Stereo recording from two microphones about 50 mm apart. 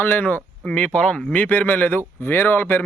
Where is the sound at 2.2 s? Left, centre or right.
Left.